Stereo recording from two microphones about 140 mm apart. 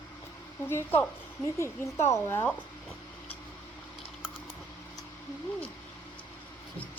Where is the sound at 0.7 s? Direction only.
15° left (ahead or behind).